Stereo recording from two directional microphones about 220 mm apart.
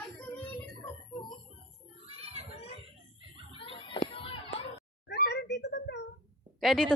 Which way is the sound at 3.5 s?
20° left (ahead or behind).